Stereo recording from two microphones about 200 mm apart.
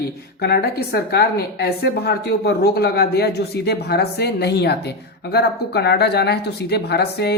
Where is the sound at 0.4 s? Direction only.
55° left (ahead or behind).